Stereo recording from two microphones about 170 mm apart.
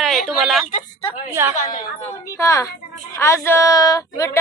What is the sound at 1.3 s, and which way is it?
Speech, 15° right (ahead or behind).